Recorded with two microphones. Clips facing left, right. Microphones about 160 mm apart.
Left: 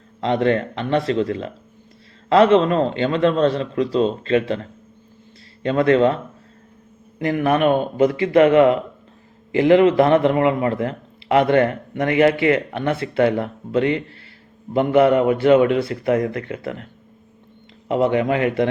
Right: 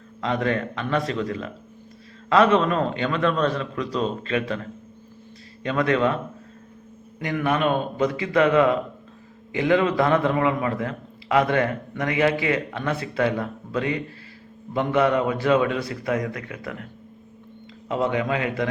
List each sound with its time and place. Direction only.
0.2 s a man's voice: 30° left (ahead or behind)
5.6 s speech: 30° left (ahead or behind)
7.3 s a man's voice: 30° left (ahead or behind)
17.8 s a man's voice: 30° left (ahead or behind)